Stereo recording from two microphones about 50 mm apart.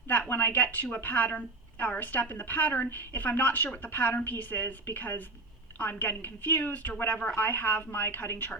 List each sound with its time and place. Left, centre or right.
0.1 s a woman's voice: left
8.0 s a woman's voice: left